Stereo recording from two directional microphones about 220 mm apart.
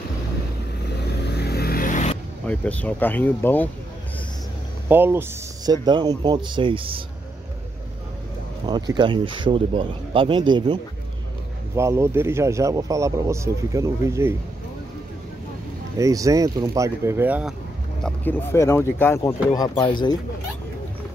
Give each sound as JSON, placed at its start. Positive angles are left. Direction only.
{"t": 1.3, "sound": "vehicle", "side_deg": 45}
{"t": 2.4, "sound": "speech", "side_deg": 5}
{"t": 4.8, "sound": "speech", "side_deg": -10}
{"t": 8.6, "sound": "speech", "side_deg": -20}
{"t": 16.0, "sound": "speech", "side_deg": -15}
{"t": 18.0, "sound": "speech", "side_deg": 10}